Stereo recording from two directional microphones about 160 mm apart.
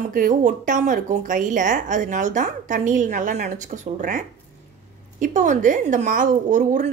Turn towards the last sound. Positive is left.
turn(degrees=-50)  # may be behind; listen again after turning